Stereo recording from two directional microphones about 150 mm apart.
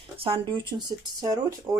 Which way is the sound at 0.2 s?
35° right (ahead or behind).